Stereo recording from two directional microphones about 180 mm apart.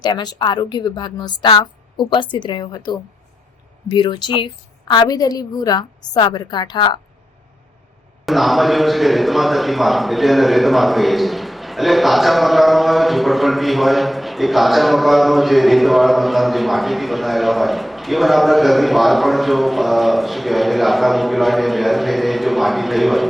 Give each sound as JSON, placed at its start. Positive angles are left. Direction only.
{"t": 0.0, "sound": "a woman's voice", "side_deg": 25}
{"t": 8.2, "sound": "a man's voice", "side_deg": 0}